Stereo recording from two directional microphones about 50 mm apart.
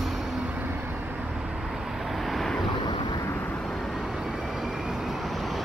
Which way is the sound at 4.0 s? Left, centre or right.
Centre.